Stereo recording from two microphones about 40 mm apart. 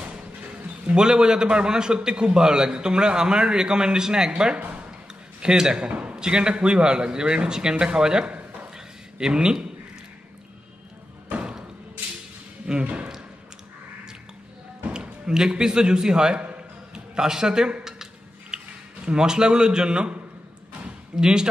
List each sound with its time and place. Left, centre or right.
0.9 s a man's voice: centre
4.6 s speech: right
5.4 s a man's voice: centre
5.9 s a man's voice: right
8.7 s a sound: centre
12.8 s speech: right
14.9 s a man's voice: centre
20.8 s a sound: centre